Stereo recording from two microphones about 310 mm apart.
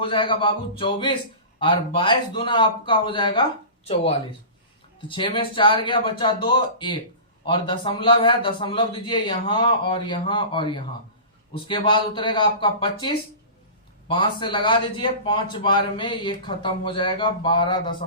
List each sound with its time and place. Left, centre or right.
0.0 s a man's voice: centre
5.0 s a man's voice: centre